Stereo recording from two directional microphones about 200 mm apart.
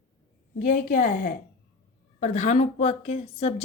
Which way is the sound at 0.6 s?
40° left (ahead or behind).